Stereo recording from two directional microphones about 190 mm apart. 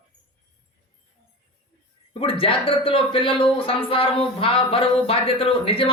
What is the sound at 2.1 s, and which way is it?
Speech, 30° left (ahead or behind).